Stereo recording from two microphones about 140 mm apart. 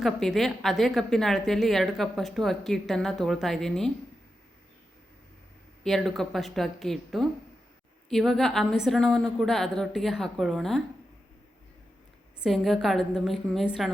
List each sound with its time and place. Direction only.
0.0 s a woman's voice: centre (ahead or behind)
5.8 s a woman's voice: centre (ahead or behind)
12.4 s a woman's voice: centre (ahead or behind)